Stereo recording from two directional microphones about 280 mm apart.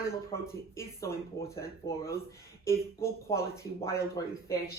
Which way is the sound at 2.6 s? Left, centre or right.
Centre.